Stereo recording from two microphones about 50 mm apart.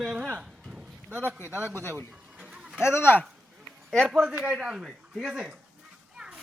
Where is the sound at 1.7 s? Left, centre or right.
Right.